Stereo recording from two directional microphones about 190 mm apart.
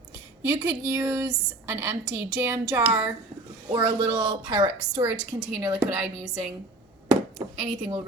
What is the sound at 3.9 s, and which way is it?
A woman's voice, 30° right (ahead or behind).